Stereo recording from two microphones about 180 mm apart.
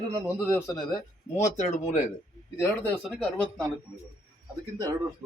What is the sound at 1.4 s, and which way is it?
Speech, 40° left (ahead or behind).